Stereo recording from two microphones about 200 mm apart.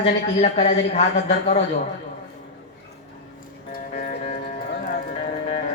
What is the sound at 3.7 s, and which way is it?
Music, 45° left (ahead or behind).